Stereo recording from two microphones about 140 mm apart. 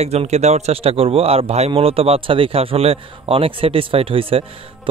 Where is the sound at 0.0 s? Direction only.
50° right (ahead or behind).